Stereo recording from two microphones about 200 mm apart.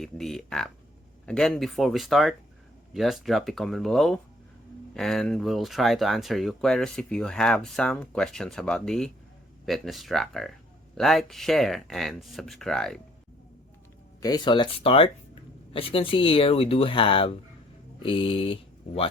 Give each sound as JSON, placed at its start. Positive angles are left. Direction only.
{"t": 0.0, "sound": "speech", "side_deg": 0}
{"t": 14.2, "sound": "speech", "side_deg": 20}